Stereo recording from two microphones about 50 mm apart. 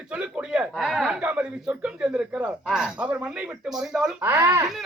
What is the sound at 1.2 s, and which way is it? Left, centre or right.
Speech, right.